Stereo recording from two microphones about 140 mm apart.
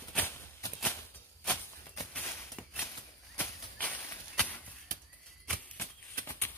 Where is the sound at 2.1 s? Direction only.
15° left (ahead or behind).